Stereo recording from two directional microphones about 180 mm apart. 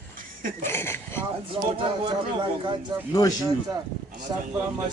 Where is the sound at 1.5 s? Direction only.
30° right (ahead or behind).